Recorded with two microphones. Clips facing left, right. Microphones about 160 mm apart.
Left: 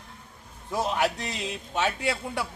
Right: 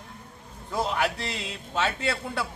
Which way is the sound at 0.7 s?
20° left (ahead or behind).